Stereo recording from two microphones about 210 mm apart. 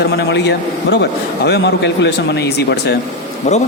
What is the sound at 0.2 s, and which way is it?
A man's voice, 55° left (ahead or behind).